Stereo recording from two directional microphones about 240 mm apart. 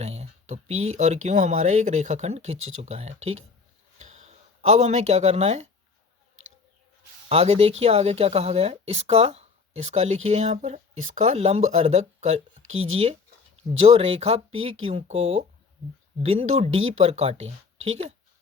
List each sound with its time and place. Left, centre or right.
0.0 s speech: right
3.9 s a sound: right
7.3 s speech: right